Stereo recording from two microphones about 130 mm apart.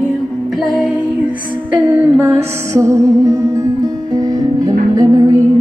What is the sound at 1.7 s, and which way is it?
Music, 15° right (ahead or behind).